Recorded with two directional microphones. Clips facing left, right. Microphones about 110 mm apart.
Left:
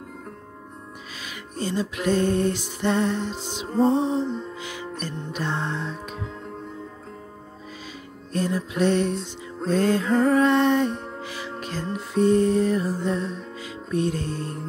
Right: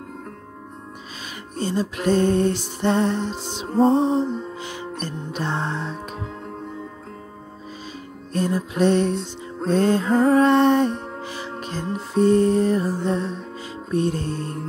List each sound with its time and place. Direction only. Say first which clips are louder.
1.6 s music: right 2 dB; 30° right (ahead or behind)
8.3 s music: right 2 dB; 35° right (ahead or behind)